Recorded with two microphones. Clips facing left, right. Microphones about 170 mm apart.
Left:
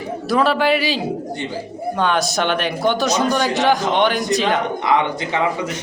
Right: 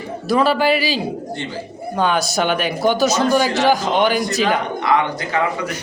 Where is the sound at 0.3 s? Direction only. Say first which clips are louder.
Right 1 dB; centre (ahead or behind).